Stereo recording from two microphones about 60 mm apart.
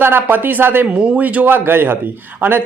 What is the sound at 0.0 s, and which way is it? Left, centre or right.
A man's voice, right.